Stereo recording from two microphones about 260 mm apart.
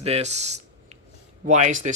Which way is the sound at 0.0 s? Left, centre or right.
Right.